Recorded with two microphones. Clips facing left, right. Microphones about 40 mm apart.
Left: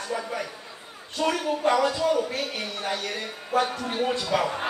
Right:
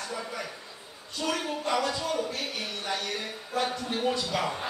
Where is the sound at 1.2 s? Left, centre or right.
Left.